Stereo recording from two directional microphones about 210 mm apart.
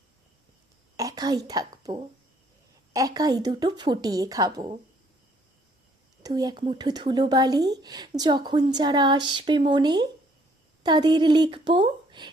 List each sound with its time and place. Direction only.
0.9 s a woman's voice: 15° right (ahead or behind)
6.2 s a woman's voice: 20° right (ahead or behind)